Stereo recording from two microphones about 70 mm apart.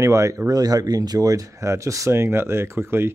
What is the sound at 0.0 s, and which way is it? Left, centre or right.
Speech, right.